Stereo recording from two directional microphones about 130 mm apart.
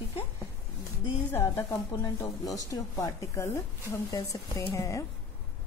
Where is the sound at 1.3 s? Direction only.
20° left (ahead or behind).